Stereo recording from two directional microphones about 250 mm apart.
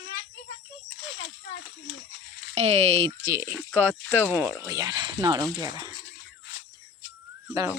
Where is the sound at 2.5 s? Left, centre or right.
Right.